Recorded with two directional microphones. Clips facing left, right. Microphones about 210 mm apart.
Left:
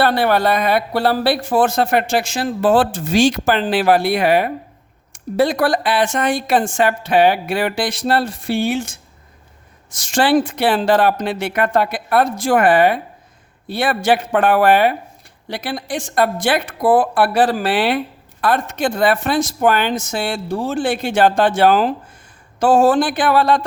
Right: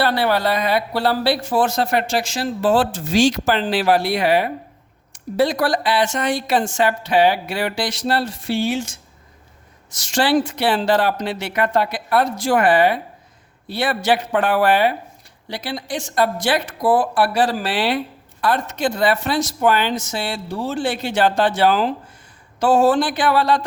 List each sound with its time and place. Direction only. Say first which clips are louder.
0.0 s a woman's voice: left 3 dB; 50° left (ahead or behind)